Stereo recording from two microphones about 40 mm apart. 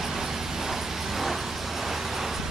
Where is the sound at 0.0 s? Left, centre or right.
Centre.